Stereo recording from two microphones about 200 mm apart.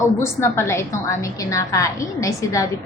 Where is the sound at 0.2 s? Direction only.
15° left (ahead or behind).